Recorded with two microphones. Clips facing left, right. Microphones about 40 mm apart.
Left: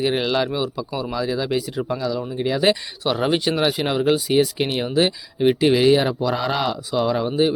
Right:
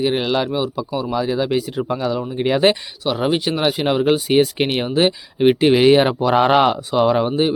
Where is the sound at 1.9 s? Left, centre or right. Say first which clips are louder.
Right 3 dB; right.